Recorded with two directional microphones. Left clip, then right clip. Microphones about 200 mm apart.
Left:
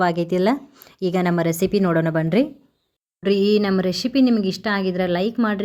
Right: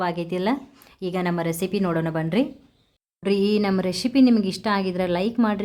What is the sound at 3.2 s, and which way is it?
Speech, 10° left (ahead or behind).